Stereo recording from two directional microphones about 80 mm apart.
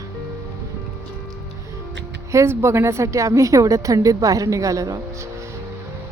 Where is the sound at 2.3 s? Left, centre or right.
Right.